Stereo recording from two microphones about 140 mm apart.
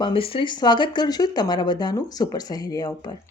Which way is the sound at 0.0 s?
40° left (ahead or behind).